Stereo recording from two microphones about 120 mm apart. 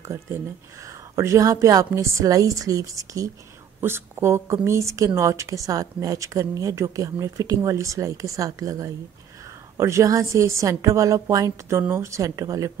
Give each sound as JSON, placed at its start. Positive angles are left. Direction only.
{"t": 0.8, "sound": "a woman's voice", "side_deg": -25}